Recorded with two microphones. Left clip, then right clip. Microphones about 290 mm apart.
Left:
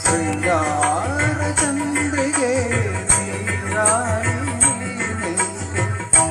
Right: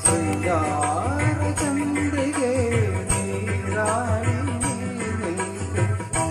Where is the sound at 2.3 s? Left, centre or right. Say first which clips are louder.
Left 3 dB; left.